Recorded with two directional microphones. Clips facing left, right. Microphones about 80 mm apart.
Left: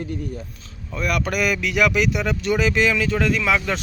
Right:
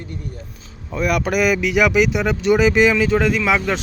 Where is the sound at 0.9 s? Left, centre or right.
Centre.